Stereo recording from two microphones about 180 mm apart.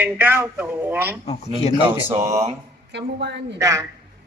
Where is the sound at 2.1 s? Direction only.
40° right (ahead or behind).